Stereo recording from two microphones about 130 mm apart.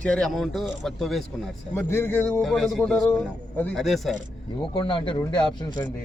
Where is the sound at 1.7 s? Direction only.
15° left (ahead or behind).